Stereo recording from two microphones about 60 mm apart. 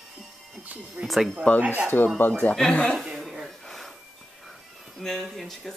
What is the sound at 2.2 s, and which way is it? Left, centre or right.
Speech, left.